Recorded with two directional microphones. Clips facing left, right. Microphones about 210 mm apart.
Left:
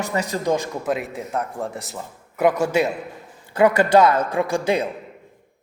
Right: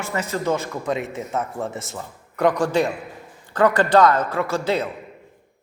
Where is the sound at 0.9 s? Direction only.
Centre (ahead or behind).